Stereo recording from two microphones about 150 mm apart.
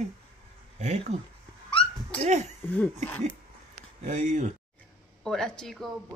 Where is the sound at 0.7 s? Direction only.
45° right (ahead or behind).